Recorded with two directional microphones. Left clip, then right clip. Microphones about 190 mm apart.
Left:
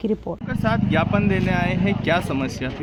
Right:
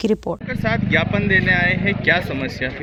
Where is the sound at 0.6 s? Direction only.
50° left (ahead or behind).